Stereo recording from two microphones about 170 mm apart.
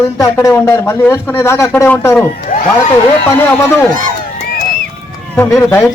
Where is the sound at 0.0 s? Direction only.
20° left (ahead or behind).